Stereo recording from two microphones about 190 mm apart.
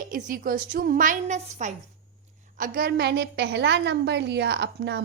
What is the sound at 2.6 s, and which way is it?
A woman's voice, 50° right (ahead or behind).